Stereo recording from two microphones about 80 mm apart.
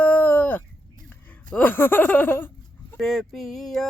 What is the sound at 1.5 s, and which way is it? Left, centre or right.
Laughter, centre.